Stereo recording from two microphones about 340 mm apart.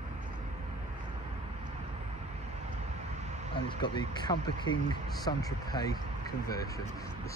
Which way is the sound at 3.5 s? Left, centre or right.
Centre.